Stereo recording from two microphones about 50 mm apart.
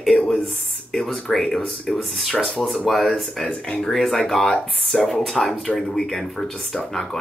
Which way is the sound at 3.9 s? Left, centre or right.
Centre.